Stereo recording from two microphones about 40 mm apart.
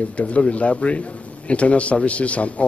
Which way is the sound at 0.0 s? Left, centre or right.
Left.